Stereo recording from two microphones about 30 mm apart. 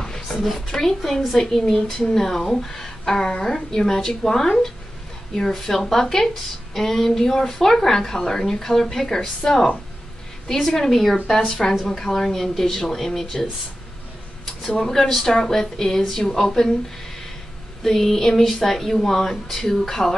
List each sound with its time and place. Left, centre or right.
0.3 s a sound: centre
0.6 s a woman's voice: centre
1.9 s speech: left
2.1 s a woman's voice: centre
5.6 s a woman's voice: centre
10.7 s a woman's voice: centre
14.8 s a woman's voice: centre
17.8 s a woman's voice: centre